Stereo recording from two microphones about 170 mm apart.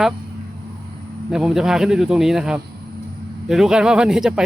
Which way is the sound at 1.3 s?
5° right (ahead or behind).